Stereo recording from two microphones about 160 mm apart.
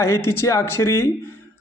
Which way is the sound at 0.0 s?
15° left (ahead or behind).